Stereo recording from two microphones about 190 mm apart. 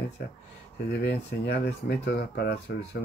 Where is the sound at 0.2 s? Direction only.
55° left (ahead or behind).